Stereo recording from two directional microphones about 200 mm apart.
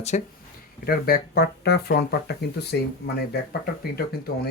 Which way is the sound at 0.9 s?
50° left (ahead or behind).